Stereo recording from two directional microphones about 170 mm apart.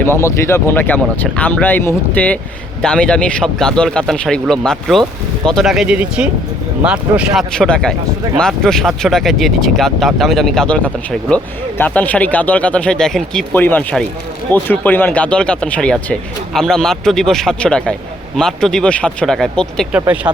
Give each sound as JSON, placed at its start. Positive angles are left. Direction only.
{"t": 0.0, "sound": "speech", "side_deg": 15}
{"t": 20.3, "sound": "speech", "side_deg": -25}